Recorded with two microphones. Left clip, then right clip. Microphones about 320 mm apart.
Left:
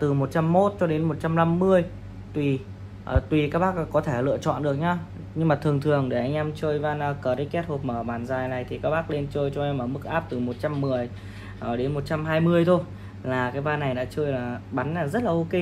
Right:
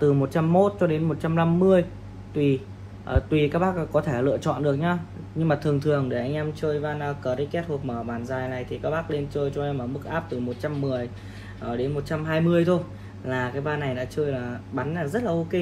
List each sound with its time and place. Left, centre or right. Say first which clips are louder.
0.0 s a man's voice: right 2 dB; left
3.1 s a man's voice: right 1 dB; left